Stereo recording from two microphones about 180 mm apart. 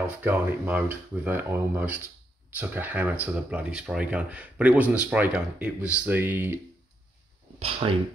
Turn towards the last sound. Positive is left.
turn(degrees=-30)  # may be behind; listen again after turning